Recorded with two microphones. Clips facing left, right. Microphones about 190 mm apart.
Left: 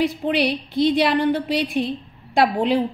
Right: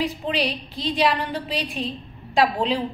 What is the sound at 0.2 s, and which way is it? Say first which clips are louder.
A woman's voice: left 5 dB; 60° left (ahead or behind).